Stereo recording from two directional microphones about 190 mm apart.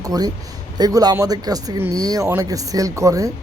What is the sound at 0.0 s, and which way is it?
Speech, 20° right (ahead or behind).